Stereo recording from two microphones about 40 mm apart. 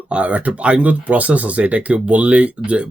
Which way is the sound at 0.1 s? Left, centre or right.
Right.